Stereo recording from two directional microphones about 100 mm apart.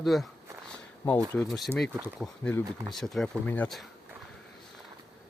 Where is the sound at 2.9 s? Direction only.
Centre (ahead or behind).